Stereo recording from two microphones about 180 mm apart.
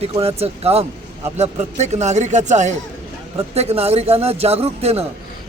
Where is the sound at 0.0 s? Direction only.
35° right (ahead or behind).